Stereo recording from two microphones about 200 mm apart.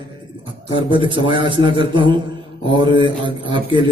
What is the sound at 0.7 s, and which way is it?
A man's voice, 25° right (ahead or behind).